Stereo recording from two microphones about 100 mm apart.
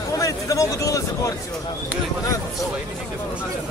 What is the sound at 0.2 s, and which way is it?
Speech, 35° left (ahead or behind).